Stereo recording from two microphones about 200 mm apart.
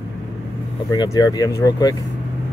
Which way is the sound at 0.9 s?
20° left (ahead or behind).